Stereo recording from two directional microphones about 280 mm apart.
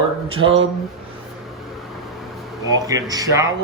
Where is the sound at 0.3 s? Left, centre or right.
Centre.